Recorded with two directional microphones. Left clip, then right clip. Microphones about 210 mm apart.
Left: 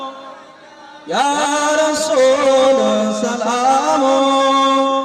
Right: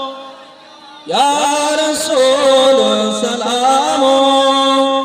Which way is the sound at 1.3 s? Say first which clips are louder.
Right 1 dB; 50° right (ahead or behind).